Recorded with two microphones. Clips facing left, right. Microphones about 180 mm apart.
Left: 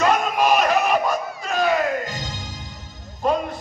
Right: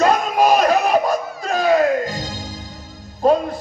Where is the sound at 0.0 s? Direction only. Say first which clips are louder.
Right 3 dB; 40° right (ahead or behind).